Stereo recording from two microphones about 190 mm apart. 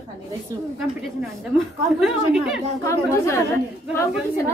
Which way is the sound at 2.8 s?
15° left (ahead or behind).